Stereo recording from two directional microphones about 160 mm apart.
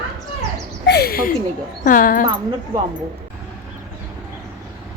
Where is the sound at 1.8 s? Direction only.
55° left (ahead or behind).